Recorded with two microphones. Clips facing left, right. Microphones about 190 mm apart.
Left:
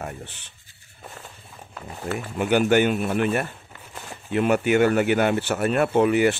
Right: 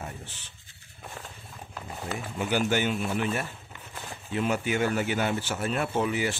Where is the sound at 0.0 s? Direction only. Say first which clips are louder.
Left 6 dB; 65° left (ahead or behind).